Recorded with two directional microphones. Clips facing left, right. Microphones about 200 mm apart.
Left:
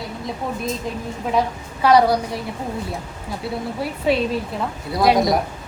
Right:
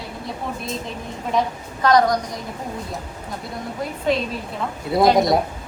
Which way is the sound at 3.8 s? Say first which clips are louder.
Left 1 dB; 5° left (ahead or behind).